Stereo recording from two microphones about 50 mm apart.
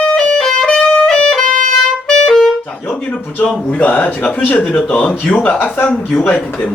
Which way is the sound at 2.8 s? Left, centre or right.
Left.